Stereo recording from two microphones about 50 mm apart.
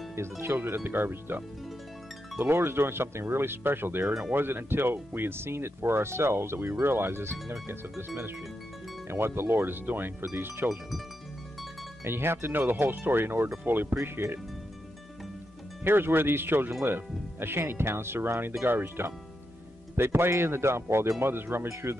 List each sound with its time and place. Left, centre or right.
0.1 s speech: right
0.7 s speech: right
9.0 s speech: right
12.0 s speech: right
15.8 s speech: right